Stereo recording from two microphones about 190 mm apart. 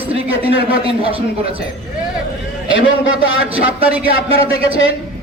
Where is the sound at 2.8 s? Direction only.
90° left.